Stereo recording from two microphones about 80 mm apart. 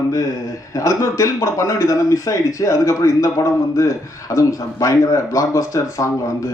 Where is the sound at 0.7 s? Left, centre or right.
Left.